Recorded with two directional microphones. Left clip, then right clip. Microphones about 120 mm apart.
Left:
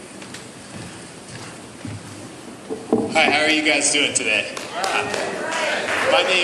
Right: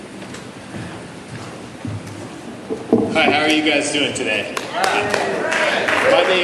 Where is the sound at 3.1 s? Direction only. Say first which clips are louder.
Even; 30° left (ahead or behind).